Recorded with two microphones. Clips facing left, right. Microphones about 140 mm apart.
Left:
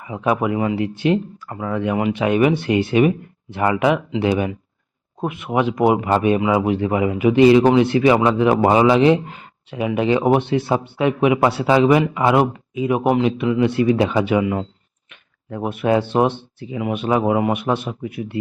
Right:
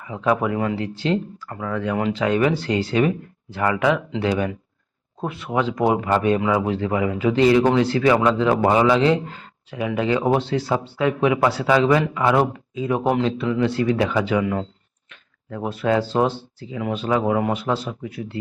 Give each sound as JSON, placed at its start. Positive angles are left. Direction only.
{"t": 0.0, "sound": "a man's voice", "side_deg": 15}
{"t": 14.4, "sound": "speech", "side_deg": 10}
{"t": 15.1, "sound": "a sound", "side_deg": 20}
{"t": 16.1, "sound": "a man's voice", "side_deg": 20}